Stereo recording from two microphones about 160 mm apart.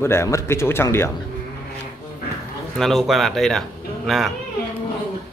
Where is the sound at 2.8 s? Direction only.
Centre (ahead or behind).